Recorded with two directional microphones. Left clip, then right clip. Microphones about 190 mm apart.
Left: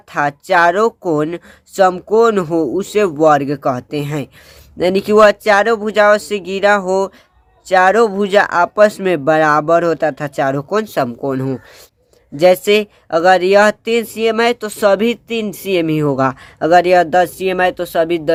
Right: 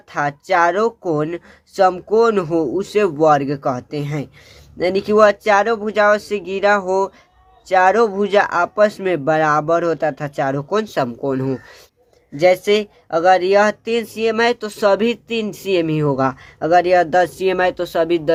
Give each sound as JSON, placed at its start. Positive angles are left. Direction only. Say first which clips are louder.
{"t": 0.1, "sound": "speech", "louder": "left 4 dB", "side_deg": 25}
{"t": 12.4, "sound": "speech", "louder": "left 3 dB", "side_deg": 30}